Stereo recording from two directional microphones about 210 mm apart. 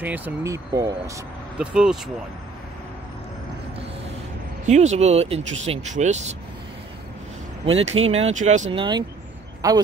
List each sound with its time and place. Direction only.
0.0 s speech: 10° right (ahead or behind)
1.7 s speech: 5° right (ahead or behind)
4.6 s speech: 35° right (ahead or behind)
7.6 s speech: 30° right (ahead or behind)
8.7 s speech: 20° right (ahead or behind)